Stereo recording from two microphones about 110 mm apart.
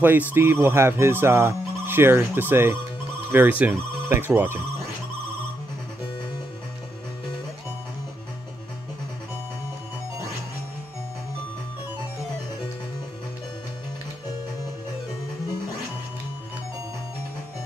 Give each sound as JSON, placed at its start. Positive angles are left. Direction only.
{"t": 0.3, "sound": "speech", "side_deg": -20}